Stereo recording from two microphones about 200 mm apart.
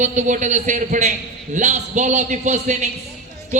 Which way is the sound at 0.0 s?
35° right (ahead or behind).